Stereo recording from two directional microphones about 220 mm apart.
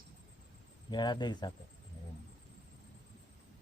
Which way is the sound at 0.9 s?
20° left (ahead or behind).